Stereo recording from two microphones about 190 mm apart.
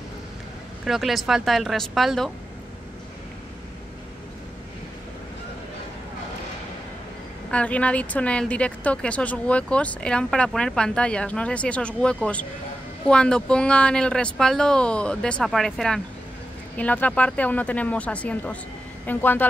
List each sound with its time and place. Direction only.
0.8 s speech: centre (ahead or behind)
7.5 s a woman's voice: 5° left (ahead or behind)